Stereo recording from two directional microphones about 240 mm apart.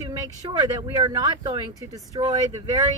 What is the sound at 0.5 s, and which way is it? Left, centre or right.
Speech, centre.